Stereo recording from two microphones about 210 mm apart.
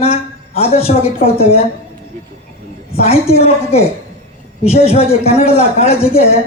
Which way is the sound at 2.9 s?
30° left (ahead or behind).